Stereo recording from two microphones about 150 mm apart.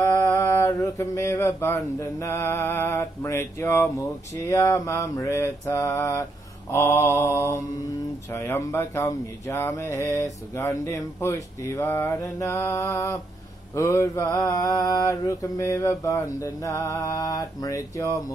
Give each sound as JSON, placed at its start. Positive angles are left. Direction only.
{"t": 0.0, "sound": "a sound", "side_deg": 20}
{"t": 4.5, "sound": "speech", "side_deg": 20}
{"t": 6.7, "sound": "mantra", "side_deg": 20}
{"t": 8.3, "sound": "speech", "side_deg": 20}